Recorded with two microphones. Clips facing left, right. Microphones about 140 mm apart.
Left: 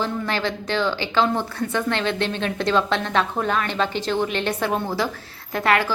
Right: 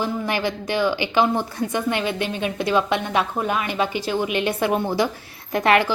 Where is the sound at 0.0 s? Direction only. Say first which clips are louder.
Right 1 dB; 15° right (ahead or behind).